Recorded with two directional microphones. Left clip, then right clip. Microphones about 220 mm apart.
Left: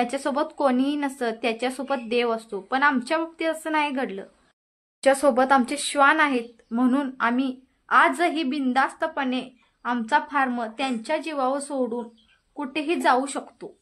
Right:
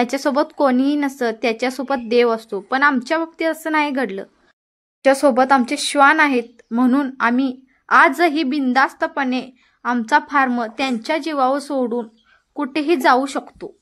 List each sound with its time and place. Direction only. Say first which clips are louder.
0.0 s a woman's voice: right 6 dB; 25° right (ahead or behind)